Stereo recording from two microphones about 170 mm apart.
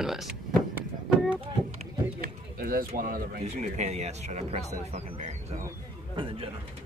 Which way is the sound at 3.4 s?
40° right (ahead or behind).